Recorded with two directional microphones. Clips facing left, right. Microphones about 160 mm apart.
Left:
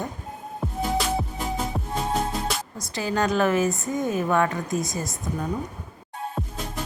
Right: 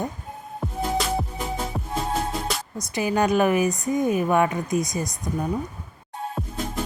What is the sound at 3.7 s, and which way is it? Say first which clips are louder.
Speech: right 3 dB; centre (ahead or behind).